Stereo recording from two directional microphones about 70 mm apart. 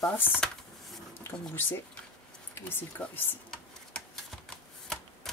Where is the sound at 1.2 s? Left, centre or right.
Left.